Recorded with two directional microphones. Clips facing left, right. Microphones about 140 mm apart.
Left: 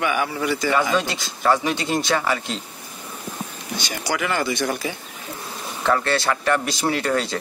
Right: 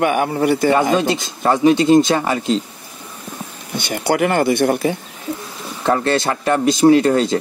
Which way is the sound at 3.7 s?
60° right (ahead or behind).